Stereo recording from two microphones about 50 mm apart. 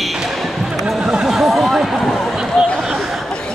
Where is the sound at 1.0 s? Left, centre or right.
Centre.